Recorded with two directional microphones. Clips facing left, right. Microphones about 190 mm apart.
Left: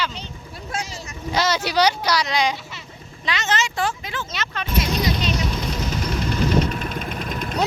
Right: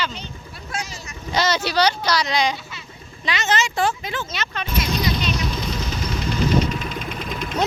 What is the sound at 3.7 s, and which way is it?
Speech, 20° right (ahead or behind).